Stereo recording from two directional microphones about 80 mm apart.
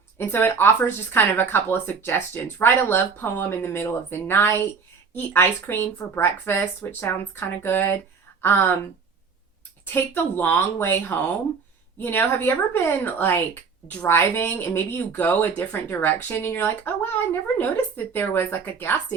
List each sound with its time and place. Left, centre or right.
0.2 s speech: left
6.6 s speech: left
9.9 s speech: left